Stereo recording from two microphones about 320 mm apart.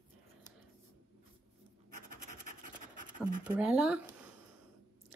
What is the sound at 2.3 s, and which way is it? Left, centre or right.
Scratch, right.